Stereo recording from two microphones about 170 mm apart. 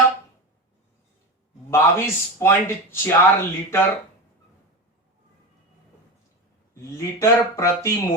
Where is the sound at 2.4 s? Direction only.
15° left (ahead or behind).